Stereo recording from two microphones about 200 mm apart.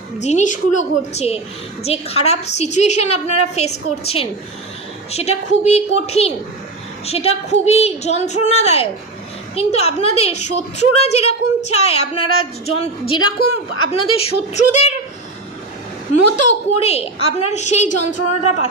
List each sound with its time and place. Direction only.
0.2 s a woman's voice: 35° left (ahead or behind)
16.3 s a woman's voice: 35° left (ahead or behind)